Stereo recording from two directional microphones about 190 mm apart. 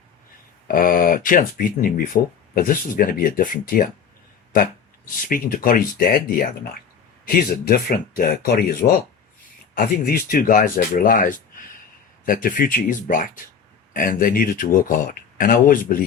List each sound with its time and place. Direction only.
0.7 s speech: 50° left (ahead or behind)